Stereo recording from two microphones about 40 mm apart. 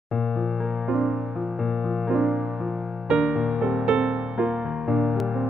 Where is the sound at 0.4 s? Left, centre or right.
Centre.